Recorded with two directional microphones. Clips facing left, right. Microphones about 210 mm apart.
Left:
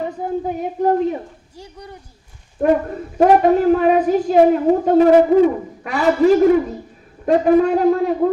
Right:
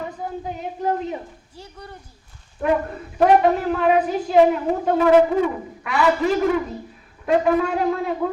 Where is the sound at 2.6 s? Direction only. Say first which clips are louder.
Left 5 dB; 40° left (ahead or behind).